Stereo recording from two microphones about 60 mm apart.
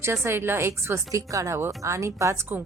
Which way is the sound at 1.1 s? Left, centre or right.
Right.